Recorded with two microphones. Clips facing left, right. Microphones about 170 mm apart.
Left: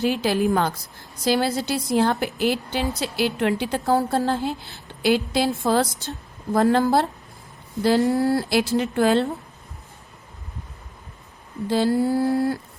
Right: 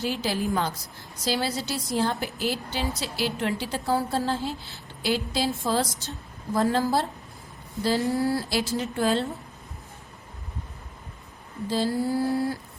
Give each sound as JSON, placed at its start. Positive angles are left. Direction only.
{"t": 0.0, "sound": "a woman's voice", "side_deg": 60}
{"t": 8.1, "sound": "a woman's voice", "side_deg": 60}
{"t": 11.7, "sound": "a woman's voice", "side_deg": 60}